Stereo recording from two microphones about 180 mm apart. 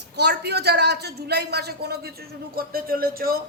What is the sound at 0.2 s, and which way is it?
A man's voice, 65° right (ahead or behind).